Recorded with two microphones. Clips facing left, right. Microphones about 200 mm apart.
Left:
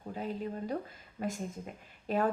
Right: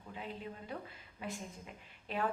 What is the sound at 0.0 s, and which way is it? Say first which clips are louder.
A woman's voice: left 8 dB; 40° left (ahead or behind).